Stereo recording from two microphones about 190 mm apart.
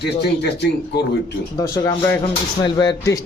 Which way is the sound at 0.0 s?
60° left (ahead or behind).